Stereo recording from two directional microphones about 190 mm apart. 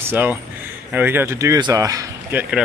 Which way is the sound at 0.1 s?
10° right (ahead or behind).